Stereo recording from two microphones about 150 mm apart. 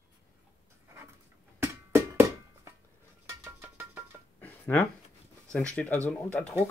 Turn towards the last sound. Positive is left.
turn(degrees=10)  # may be behind; listen again after turning